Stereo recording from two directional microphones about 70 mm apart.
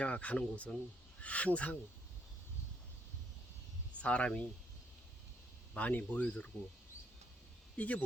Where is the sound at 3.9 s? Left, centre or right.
Centre.